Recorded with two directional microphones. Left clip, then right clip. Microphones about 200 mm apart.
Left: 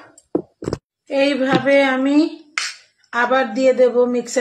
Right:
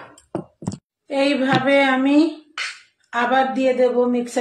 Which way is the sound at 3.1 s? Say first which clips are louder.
Left 1 dB; 25° left (ahead or behind).